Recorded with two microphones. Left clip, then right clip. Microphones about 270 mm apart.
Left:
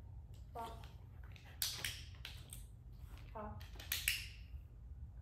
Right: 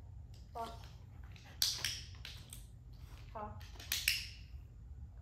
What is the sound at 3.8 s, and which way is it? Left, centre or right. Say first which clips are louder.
Finger snapping: right 4 dB; centre.